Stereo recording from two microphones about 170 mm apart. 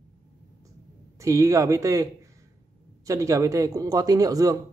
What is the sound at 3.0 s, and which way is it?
A man's voice, 20° right (ahead or behind).